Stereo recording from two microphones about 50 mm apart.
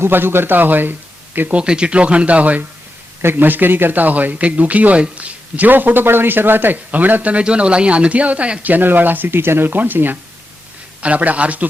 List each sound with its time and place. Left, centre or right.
0.0 s speech: right
1.5 s speech: right
3.2 s a man's voice: right
8.6 s a man's voice: right
11.0 s speech: right